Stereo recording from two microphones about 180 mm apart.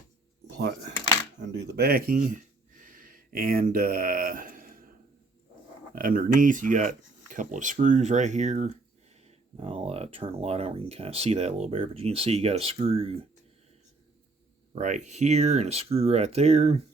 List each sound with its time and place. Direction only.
0.4 s a sound: 65° right (ahead or behind)
1.4 s speech: 70° right (ahead or behind); by 4.8 s 50° right (ahead or behind)
5.9 s speech: 50° right (ahead or behind); by 13.2 s 35° right (ahead or behind)
14.8 s speech: 45° right (ahead or behind)